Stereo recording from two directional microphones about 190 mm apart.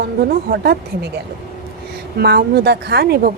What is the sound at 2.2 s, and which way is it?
A woman's voice, 60° right (ahead or behind).